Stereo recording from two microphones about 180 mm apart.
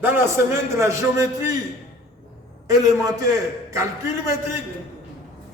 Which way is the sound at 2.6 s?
20° right (ahead or behind).